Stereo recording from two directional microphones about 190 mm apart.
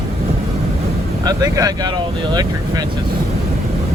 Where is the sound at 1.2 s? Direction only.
20° right (ahead or behind).